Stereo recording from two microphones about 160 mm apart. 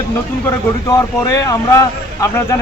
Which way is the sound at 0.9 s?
20° left (ahead or behind).